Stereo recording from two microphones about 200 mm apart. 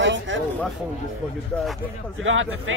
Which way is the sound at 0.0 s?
70° right (ahead or behind).